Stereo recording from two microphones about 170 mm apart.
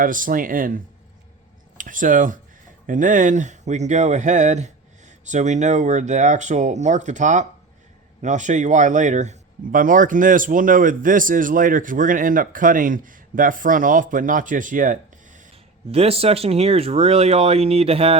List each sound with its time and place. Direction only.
0.0 s speech: 55° right (ahead or behind)
1.8 s speech: 50° right (ahead or behind)
15.9 s speech: 35° right (ahead or behind)